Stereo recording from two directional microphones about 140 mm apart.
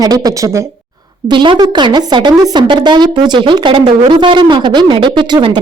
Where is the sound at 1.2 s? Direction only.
35° right (ahead or behind).